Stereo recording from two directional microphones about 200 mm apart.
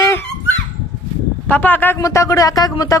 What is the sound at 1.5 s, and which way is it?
Speech, 10° left (ahead or behind).